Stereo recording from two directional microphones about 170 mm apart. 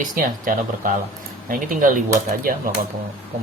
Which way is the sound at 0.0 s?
55° right (ahead or behind).